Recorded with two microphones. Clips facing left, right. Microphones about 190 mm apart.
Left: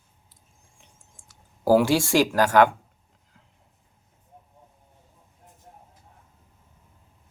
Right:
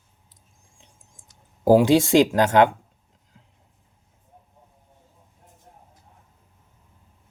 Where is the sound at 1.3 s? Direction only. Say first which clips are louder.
Right 3 dB; 20° right (ahead or behind).